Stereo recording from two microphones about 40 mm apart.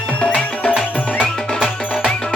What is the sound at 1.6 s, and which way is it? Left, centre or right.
Music, centre.